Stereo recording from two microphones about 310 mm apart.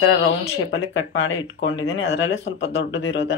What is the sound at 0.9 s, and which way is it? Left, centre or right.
Speech, left.